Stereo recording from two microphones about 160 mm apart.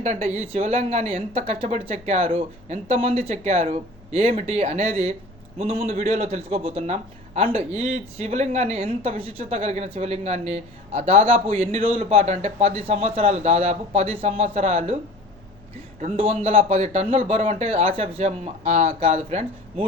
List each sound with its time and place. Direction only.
0.0 s a man's voice: 45° right (ahead or behind)
16.0 s a man's voice: 40° right (ahead or behind)